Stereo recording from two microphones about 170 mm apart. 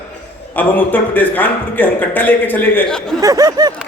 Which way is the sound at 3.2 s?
20° right (ahead or behind).